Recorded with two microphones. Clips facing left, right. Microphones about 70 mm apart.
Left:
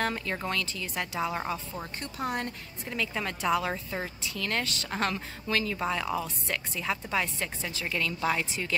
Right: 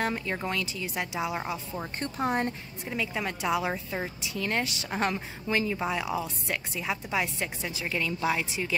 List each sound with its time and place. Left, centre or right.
0.0 s a woman's voice: centre
2.1 s a woman's voice: right
2.9 s a woman's voice: centre